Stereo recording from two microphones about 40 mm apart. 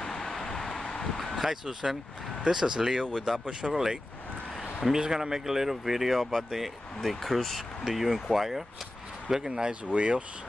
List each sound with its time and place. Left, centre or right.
0.0 s vehicle: centre
1.4 s speech: centre
9.3 s speech: right
9.8 s speech: right